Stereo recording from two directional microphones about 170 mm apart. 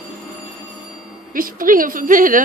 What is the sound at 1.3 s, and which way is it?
A woman's voice, 55° right (ahead or behind).